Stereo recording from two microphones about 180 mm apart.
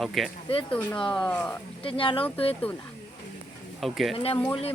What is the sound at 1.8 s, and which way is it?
Speech, 30° left (ahead or behind).